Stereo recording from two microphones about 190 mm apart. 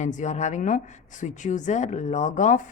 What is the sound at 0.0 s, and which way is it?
A woman's voice, 40° left (ahead or behind).